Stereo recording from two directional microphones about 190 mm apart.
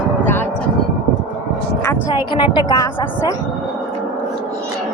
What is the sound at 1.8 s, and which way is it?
Speech, 15° left (ahead or behind).